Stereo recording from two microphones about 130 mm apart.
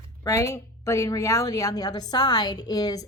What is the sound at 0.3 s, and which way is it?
A woman's voice, 25° left (ahead or behind).